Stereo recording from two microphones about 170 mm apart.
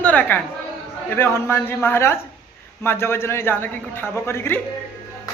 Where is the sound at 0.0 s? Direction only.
10° left (ahead or behind).